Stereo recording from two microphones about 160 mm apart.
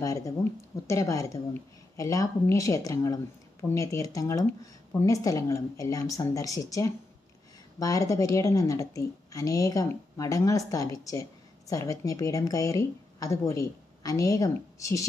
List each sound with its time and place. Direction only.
0.0 s speech: 20° left (ahead or behind)